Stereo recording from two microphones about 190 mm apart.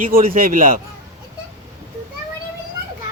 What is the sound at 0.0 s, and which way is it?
Speech, 50° right (ahead or behind).